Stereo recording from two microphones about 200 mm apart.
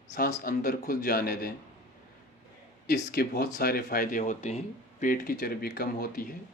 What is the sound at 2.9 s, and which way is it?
Speech, 55° left (ahead or behind).